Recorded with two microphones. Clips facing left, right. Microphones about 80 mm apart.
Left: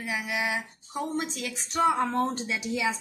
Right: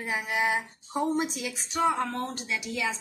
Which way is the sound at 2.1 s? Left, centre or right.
Centre.